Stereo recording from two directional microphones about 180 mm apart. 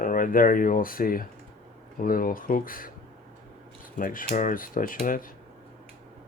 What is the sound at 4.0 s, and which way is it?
Speech, 50° left (ahead or behind).